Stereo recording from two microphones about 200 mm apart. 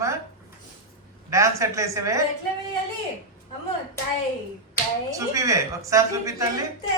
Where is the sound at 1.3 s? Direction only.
15° right (ahead or behind).